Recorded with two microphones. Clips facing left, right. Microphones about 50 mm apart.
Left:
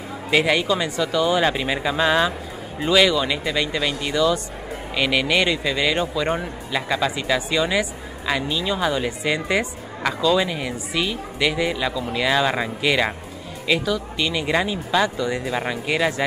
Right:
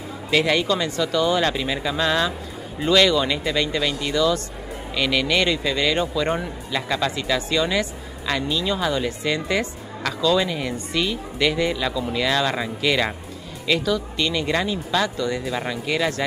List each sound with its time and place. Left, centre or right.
0.3 s speech: centre